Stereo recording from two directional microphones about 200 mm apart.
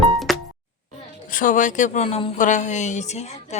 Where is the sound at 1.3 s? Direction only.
40° left (ahead or behind).